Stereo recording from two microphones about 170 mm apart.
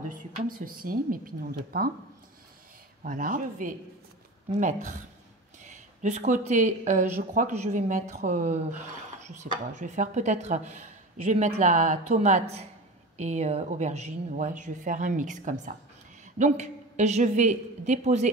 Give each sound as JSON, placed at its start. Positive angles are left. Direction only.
{"t": 0.1, "sound": "a woman's voice", "side_deg": -55}
{"t": 3.0, "sound": "a woman's voice", "side_deg": -50}